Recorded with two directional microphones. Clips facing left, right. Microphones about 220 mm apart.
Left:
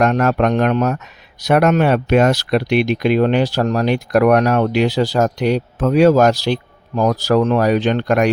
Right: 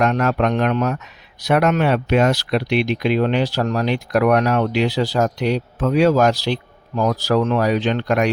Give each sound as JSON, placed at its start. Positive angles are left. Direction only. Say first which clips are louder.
{"t": 0.0, "sound": "speech", "louder": "left 3 dB", "side_deg": 45}